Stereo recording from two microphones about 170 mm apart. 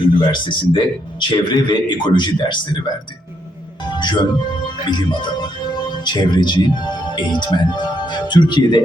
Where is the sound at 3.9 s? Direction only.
25° left (ahead or behind).